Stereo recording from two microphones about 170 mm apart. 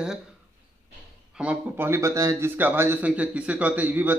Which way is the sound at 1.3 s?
5° right (ahead or behind).